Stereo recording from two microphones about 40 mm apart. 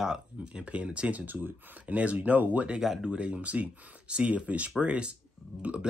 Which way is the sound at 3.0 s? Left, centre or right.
Right.